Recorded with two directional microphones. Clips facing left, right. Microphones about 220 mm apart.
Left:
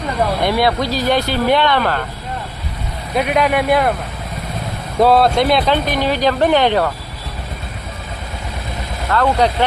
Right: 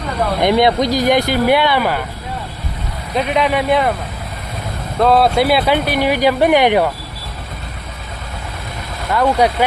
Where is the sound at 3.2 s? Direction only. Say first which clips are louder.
Left 1 dB; 5° left (ahead or behind).